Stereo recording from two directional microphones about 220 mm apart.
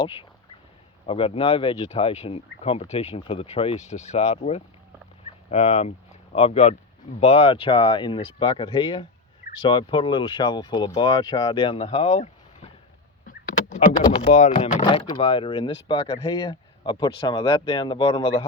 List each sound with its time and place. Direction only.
1.0 s speech: 25° left (ahead or behind)
13.2 s vehicle: 30° left (ahead or behind)
14.0 s speech: 25° left (ahead or behind)